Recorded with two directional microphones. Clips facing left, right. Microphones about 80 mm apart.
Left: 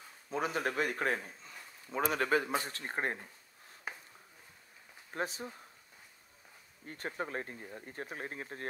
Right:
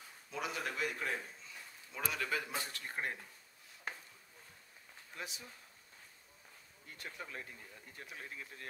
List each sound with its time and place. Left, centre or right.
0.3 s a man's voice: left
2.5 s speech: left
2.8 s speech: left
3.9 s a sound: centre
5.1 s speech: left
6.9 s speech: left